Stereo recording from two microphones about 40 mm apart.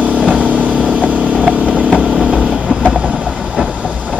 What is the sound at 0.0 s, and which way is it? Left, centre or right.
Vehicle, right.